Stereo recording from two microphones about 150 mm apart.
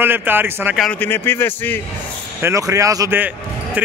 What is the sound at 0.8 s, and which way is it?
A man's voice, 10° left (ahead or behind).